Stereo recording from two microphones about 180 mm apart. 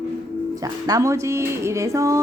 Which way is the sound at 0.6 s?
20° right (ahead or behind).